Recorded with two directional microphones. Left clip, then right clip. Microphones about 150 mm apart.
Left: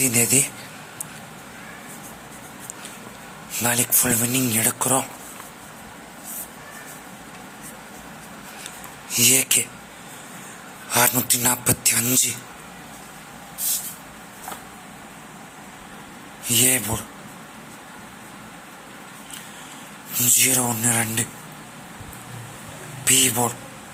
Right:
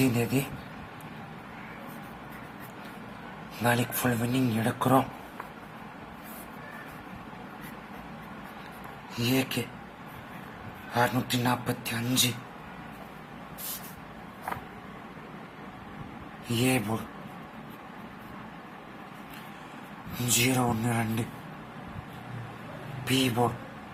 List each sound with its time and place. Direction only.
0.0 s speech: 15° left (ahead or behind)
3.6 s speech: 10° left (ahead or behind)
9.0 s speech: 25° left (ahead or behind)
10.9 s speech: 25° left (ahead or behind)
16.5 s speech: 10° left (ahead or behind)
20.5 s speech: 10° left (ahead or behind)
23.0 s speech: 15° left (ahead or behind)